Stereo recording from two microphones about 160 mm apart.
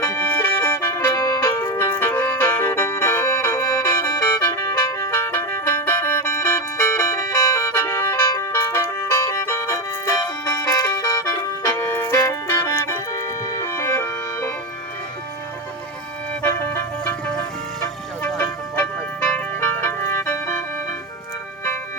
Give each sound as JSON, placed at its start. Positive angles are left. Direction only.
{"t": 0.0, "sound": "music", "side_deg": 15}
{"t": 18.2, "sound": "music", "side_deg": 10}